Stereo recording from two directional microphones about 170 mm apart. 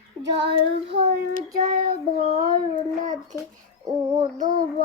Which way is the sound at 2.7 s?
20° left (ahead or behind).